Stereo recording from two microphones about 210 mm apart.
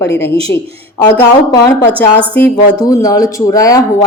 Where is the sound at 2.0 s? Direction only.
5° left (ahead or behind).